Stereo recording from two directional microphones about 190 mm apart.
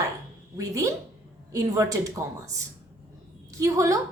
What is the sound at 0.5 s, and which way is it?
A woman's voice, 15° right (ahead or behind).